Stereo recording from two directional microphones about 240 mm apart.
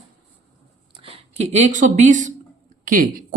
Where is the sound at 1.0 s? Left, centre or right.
Right.